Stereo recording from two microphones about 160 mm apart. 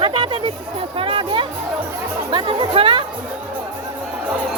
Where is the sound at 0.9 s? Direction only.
35° right (ahead or behind).